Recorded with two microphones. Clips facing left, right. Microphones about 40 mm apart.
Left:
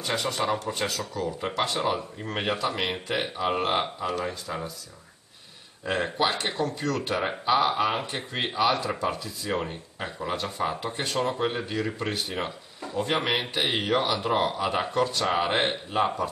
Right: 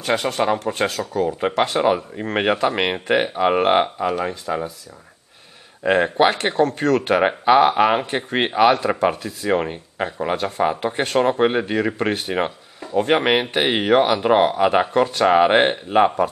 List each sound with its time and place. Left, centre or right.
0.0 s speech: right
5.9 s speech: right